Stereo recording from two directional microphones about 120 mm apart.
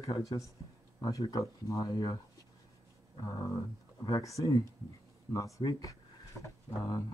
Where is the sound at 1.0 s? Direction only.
35° left (ahead or behind).